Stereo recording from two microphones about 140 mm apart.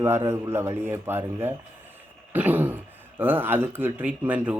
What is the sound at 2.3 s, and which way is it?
Throat clearing, 10° right (ahead or behind).